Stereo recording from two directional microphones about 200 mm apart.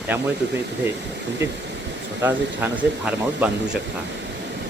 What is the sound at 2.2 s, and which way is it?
Speech, 10° right (ahead or behind).